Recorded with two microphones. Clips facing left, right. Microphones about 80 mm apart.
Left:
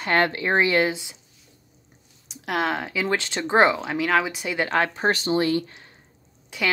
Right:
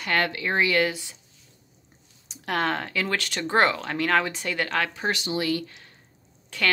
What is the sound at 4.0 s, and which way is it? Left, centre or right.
Speech, centre.